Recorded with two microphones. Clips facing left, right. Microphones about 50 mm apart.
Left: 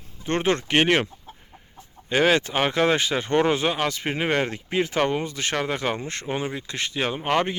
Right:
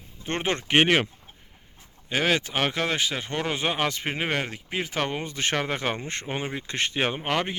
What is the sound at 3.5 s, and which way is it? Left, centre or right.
Speech, centre.